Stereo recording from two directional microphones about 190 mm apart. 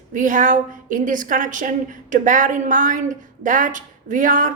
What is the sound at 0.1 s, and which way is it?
A woman's voice, 45° right (ahead or behind).